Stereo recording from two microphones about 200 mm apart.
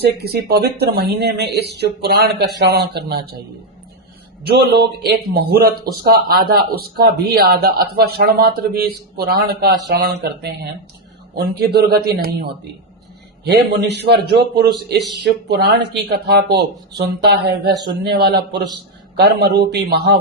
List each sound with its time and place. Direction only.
0.0 s a man's voice: 50° right (ahead or behind)
4.4 s a man's voice: 55° right (ahead or behind)